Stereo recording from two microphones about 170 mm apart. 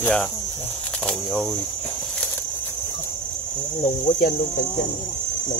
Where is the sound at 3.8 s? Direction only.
45° left (ahead or behind).